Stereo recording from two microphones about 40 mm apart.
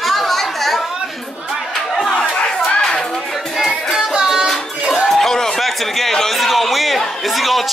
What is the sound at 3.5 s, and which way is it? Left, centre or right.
Music, centre.